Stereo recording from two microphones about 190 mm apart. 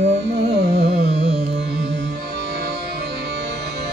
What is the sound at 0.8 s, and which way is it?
Carnatic music, 35° right (ahead or behind).